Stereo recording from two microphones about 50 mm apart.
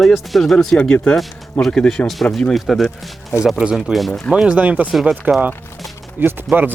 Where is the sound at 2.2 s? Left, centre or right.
Left.